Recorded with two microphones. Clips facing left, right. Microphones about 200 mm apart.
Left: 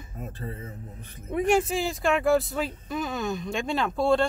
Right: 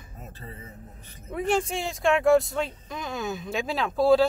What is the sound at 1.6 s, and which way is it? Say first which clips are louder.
Speech: even; centre (ahead or behind).